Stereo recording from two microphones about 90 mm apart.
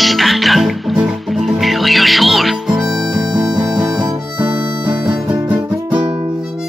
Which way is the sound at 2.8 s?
45° right (ahead or behind).